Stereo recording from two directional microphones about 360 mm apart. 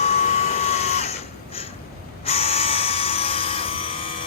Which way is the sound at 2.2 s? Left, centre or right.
Centre.